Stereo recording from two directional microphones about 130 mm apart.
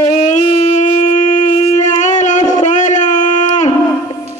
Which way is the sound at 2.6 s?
70° left (ahead or behind).